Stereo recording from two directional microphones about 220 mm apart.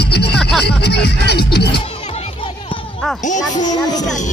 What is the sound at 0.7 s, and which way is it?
Speech, 50° left (ahead or behind).